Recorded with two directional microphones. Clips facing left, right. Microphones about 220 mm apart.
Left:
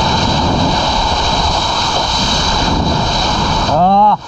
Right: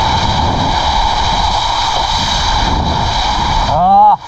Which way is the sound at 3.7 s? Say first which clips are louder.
Right 1 dB; 20° left (ahead or behind).